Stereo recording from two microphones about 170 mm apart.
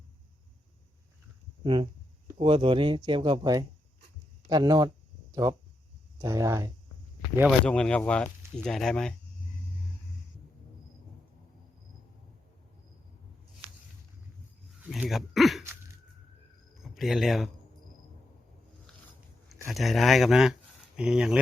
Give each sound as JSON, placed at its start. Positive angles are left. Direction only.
{"t": 1.6, "sound": "speech", "side_deg": -30}
{"t": 7.6, "sound": "speech", "side_deg": 5}
{"t": 14.8, "sound": "a sound", "side_deg": -5}
{"t": 16.8, "sound": "speech", "side_deg": 0}
{"t": 19.7, "sound": "speech", "side_deg": 0}